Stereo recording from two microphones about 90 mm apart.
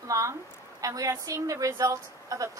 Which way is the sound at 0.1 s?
35° right (ahead or behind).